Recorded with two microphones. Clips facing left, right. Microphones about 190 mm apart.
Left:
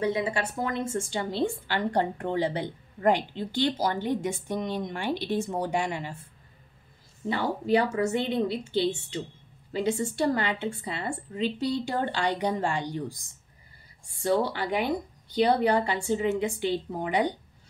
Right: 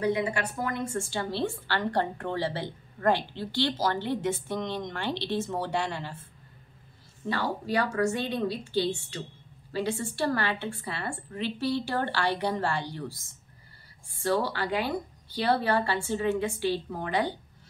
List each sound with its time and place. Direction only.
0.0 s a woman's voice: 25° left (ahead or behind)
7.2 s a woman's voice: 20° left (ahead or behind)